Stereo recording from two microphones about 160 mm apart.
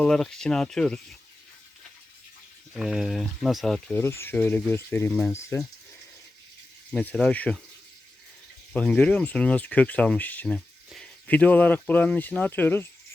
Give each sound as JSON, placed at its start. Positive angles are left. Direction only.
{"t": 0.0, "sound": "speech", "side_deg": 5}
{"t": 2.7, "sound": "speech", "side_deg": -5}
{"t": 3.9, "sound": "speech", "side_deg": 15}
{"t": 6.9, "sound": "speech", "side_deg": 10}
{"t": 8.7, "sound": "speech", "side_deg": 5}